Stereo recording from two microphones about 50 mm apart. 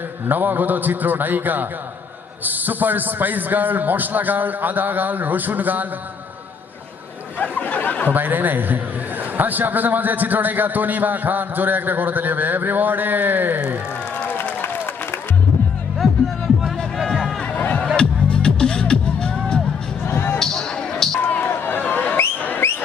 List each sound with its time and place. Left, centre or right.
0.3 s a man's voice: right
7.3 s speech: left
8.1 s a man's voice: right
14.6 s applause: left
17.6 s music: left
17.9 s music: centre
20.1 s music: left
20.4 s music: centre
21.2 s a sound: left